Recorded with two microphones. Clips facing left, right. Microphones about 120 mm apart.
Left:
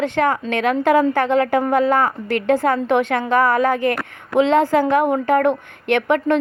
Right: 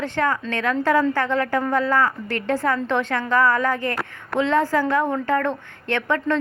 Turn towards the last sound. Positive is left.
turn(degrees=20)  # may be behind; listen again after turning